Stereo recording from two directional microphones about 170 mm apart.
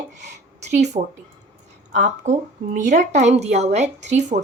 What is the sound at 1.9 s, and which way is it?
Speech, 45° right (ahead or behind).